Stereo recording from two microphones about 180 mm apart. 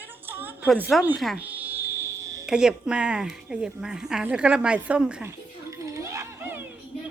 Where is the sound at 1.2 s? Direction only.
5° right (ahead or behind).